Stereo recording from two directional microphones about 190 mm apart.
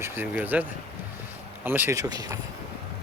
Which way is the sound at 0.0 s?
10° right (ahead or behind).